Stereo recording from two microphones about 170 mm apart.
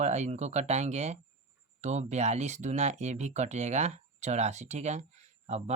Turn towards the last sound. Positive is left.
turn(degrees=-45)  # may be behind; listen again after turning